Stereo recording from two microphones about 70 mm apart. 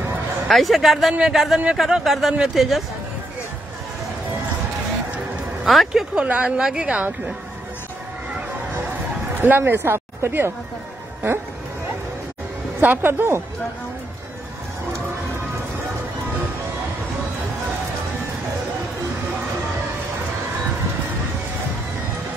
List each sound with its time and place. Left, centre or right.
0.5 s speech: centre
5.7 s speech: centre
6.1 s a woman's voice: centre
9.4 s speech: right
12.8 s a woman's voice: right